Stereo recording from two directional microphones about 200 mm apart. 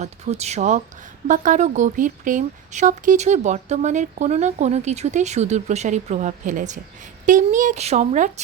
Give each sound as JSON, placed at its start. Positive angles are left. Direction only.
{"t": 0.0, "sound": "speech", "side_deg": -35}